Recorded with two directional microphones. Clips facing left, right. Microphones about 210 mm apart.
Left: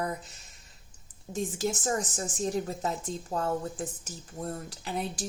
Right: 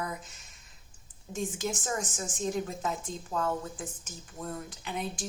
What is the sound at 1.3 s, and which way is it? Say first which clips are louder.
Speech: left 3 dB; 35° left (ahead or behind).